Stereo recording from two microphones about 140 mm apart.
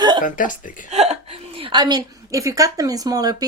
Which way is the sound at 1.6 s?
35° right (ahead or behind).